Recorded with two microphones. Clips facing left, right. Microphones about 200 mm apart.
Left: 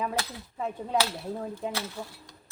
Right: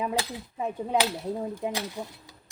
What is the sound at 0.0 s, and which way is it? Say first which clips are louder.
Speech: right 2 dB; 15° right (ahead or behind).